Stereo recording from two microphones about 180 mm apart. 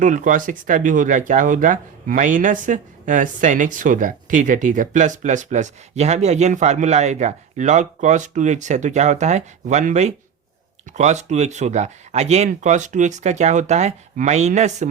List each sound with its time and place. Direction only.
0.0 s speech: 45° right (ahead or behind)